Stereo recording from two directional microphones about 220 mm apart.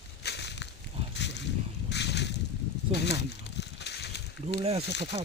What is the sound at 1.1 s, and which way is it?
Boat, 50° left (ahead or behind).